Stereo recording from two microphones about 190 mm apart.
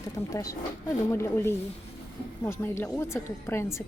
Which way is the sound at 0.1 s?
15° left (ahead or behind).